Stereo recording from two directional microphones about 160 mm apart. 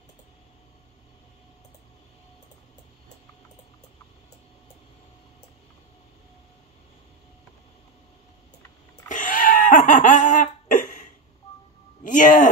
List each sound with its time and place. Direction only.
9.1 s laughter: 55° left (ahead or behind)
12.0 s speech: 55° left (ahead or behind)